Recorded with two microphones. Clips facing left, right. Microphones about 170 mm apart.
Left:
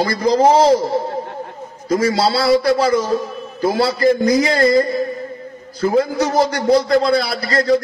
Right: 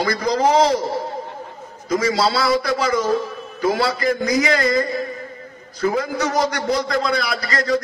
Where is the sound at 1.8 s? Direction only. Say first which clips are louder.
Left 3 dB; 30° left (ahead or behind).